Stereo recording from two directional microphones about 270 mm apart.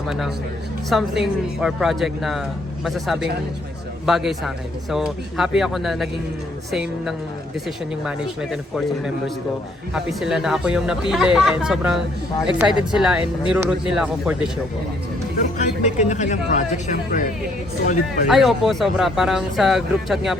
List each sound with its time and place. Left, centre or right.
0.9 s speech: centre
15.8 s speech: left
18.3 s speech: centre